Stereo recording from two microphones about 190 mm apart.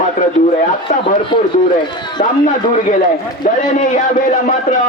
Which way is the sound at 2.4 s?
45° left (ahead or behind).